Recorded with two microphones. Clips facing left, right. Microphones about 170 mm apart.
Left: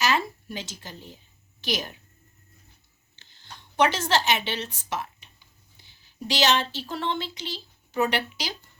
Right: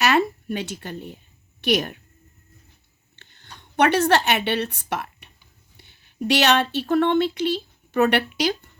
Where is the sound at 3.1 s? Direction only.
60° right (ahead or behind).